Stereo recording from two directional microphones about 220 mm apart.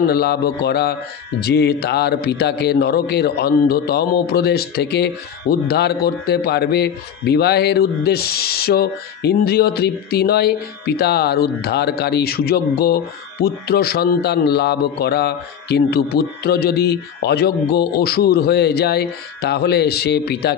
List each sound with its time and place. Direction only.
0.1 s a man's voice: 45° left (ahead or behind)